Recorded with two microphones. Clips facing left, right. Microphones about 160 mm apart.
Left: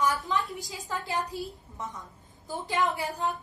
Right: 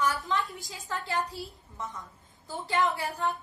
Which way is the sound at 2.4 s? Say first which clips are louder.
Even; 15° left (ahead or behind).